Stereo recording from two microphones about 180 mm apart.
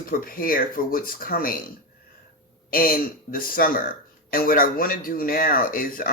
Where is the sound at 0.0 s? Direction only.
50° left (ahead or behind).